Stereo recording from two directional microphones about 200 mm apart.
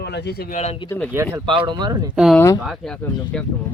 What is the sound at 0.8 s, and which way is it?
Speech, 10° left (ahead or behind).